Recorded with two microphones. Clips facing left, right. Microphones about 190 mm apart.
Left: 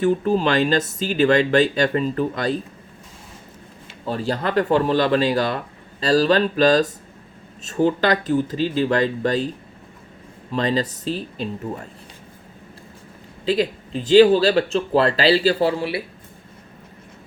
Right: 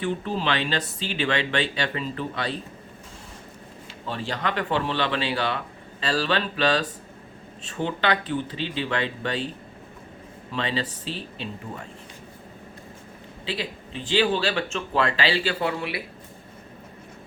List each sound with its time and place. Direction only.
0.0 s speech: 45° left (ahead or behind)
4.0 s speech: 40° left (ahead or behind)
10.5 s speech: 40° left (ahead or behind)
13.4 s speech: 40° left (ahead or behind)